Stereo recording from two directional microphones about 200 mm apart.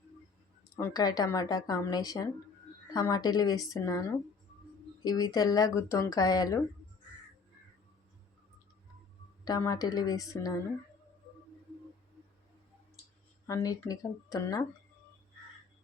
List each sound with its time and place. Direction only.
0.8 s speech: 15° left (ahead or behind)
5.0 s speech: 20° left (ahead or behind)
9.4 s speech: 20° left (ahead or behind)
13.5 s speech: 20° left (ahead or behind)